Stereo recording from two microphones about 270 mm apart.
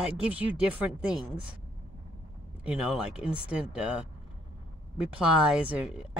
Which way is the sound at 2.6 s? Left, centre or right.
Centre.